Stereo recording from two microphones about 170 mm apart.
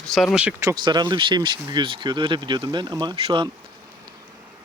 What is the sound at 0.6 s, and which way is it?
Speech, 20° right (ahead or behind).